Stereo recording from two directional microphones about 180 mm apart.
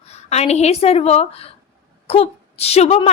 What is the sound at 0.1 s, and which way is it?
A woman's voice, 35° left (ahead or behind).